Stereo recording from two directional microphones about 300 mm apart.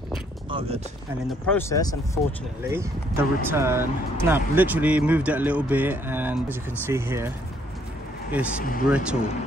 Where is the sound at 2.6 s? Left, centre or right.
Centre.